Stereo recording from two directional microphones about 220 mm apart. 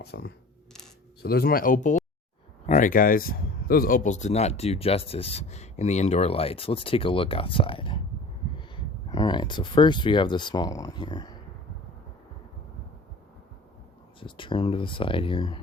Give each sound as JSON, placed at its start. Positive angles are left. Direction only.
{"t": 0.0, "sound": "speech", "side_deg": 50}
{"t": 14.2, "sound": "speech", "side_deg": 25}